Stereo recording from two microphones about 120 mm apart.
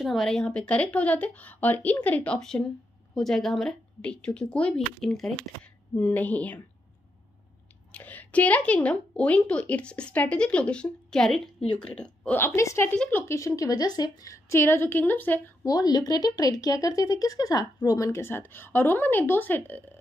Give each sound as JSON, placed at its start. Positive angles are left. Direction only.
{"t": 0.0, "sound": "a woman's voice", "side_deg": 0}
{"t": 5.9, "sound": "a woman's voice", "side_deg": 15}
{"t": 7.9, "sound": "a woman's voice", "side_deg": 15}
{"t": 12.9, "sound": "a woman's voice", "side_deg": 10}
{"t": 13.3, "sound": "speech", "side_deg": 25}
{"t": 15.6, "sound": "speech", "side_deg": 35}